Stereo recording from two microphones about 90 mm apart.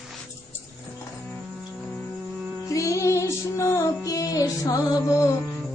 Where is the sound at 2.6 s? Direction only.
35° left (ahead or behind).